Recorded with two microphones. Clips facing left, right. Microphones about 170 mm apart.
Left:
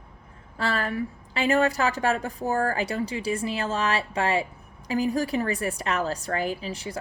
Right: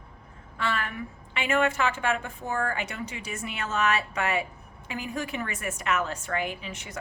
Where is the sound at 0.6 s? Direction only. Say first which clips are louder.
Left 4 dB; 35° left (ahead or behind).